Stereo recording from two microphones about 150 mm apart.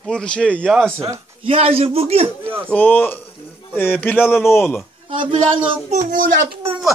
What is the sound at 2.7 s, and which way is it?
Speech, 10° left (ahead or behind).